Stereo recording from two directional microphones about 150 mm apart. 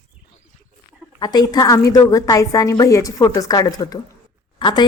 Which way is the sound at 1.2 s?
25° left (ahead or behind).